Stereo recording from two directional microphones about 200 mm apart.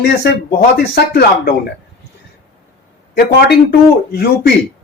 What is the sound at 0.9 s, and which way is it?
Speech, 55° left (ahead or behind).